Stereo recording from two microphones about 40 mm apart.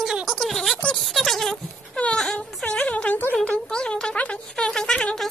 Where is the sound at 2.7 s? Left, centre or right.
Left.